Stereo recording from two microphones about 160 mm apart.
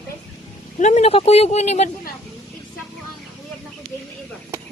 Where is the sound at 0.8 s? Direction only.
45° left (ahead or behind).